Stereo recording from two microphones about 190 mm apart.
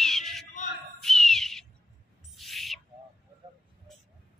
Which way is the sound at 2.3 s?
Centre (ahead or behind).